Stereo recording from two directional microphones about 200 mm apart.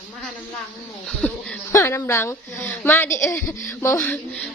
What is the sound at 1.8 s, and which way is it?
A woman's voice, 10° left (ahead or behind).